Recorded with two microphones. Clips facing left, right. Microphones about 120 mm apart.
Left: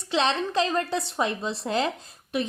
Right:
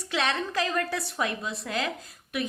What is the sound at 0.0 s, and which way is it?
A woman's voice, 25° left (ahead or behind).